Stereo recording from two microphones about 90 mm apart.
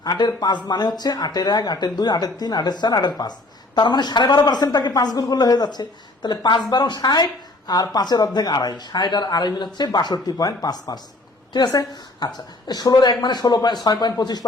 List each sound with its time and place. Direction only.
0.0 s speech: 45° left (ahead or behind)